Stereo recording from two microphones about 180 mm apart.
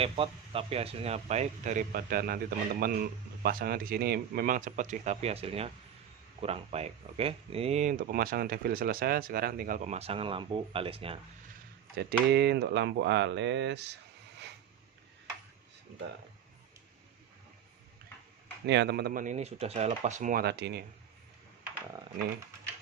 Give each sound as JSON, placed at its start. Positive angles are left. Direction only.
{"t": 0.0, "sound": "speech", "side_deg": -30}
{"t": 12.3, "sound": "speech", "side_deg": -70}
{"t": 18.6, "sound": "speech", "side_deg": -70}
{"t": 20.4, "sound": "speech", "side_deg": -70}